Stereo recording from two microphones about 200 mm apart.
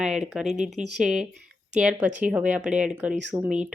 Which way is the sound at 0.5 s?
35° right (ahead or behind).